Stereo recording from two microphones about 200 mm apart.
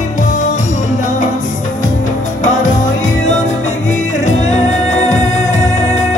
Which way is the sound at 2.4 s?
35° left (ahead or behind).